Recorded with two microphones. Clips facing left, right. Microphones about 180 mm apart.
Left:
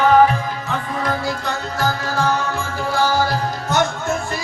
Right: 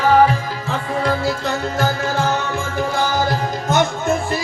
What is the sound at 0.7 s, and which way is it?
Music, 25° right (ahead or behind).